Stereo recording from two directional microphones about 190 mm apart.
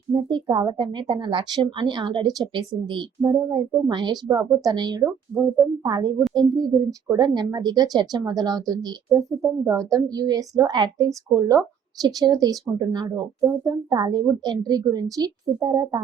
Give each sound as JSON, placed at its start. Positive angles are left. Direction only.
{"t": 0.1, "sound": "a woman's voice", "side_deg": -25}